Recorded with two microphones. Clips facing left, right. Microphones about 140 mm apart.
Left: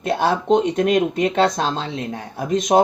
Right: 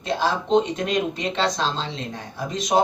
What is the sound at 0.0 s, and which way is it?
Speech, 55° left (ahead or behind).